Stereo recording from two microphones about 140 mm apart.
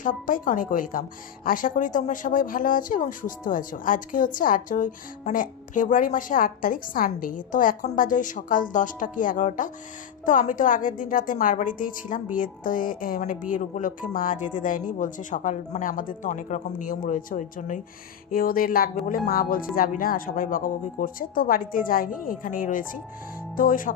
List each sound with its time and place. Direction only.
0.0 s a woman's voice: 75° left (ahead or behind)
18.3 s speech: 90° left